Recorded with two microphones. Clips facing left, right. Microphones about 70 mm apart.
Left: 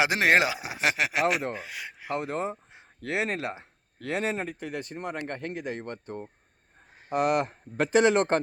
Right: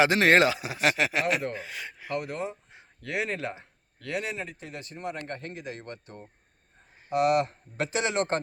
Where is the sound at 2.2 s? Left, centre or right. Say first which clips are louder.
Left 2 dB; left.